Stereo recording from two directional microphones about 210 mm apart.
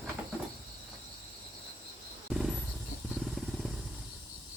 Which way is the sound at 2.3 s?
Centre (ahead or behind).